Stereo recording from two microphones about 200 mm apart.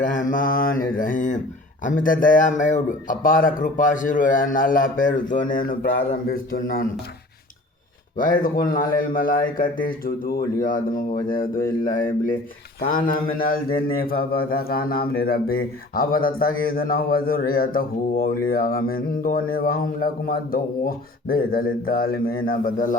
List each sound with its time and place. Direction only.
0.0 s mantra: 40° left (ahead or behind)
2.0 s a man's voice: 45° left (ahead or behind)
8.2 s a man's voice: 45° left (ahead or behind)